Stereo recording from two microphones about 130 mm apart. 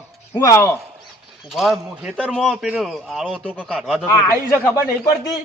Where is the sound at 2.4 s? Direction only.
5° right (ahead or behind).